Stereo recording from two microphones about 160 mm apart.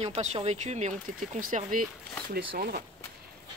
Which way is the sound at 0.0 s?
40° right (ahead or behind).